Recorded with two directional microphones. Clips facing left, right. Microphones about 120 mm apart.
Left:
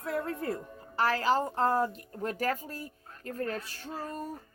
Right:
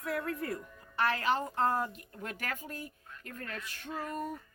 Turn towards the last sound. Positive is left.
turn(degrees=30)  # may be behind; listen again after turning